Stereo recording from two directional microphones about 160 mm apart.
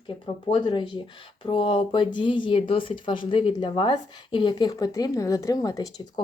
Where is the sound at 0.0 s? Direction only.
30° left (ahead or behind).